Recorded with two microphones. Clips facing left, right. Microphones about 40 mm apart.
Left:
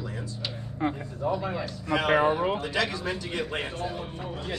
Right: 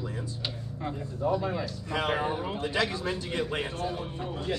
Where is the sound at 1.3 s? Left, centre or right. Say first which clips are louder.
Right 1 dB; centre.